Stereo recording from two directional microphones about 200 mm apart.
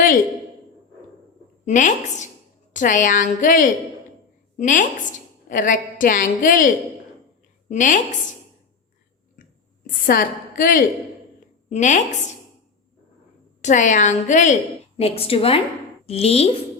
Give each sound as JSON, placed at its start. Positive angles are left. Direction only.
{"t": 1.6, "sound": "a woman's voice", "side_deg": 40}
{"t": 9.8, "sound": "a woman's voice", "side_deg": 45}
{"t": 13.6, "sound": "a woman's voice", "side_deg": 40}